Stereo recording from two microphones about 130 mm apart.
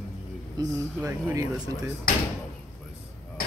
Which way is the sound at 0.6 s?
30° right (ahead or behind).